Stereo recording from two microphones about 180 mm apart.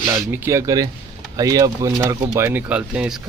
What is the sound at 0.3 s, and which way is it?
Speech, 15° right (ahead or behind).